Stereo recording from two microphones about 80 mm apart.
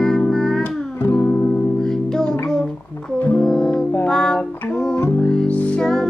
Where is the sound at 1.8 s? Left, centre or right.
Centre.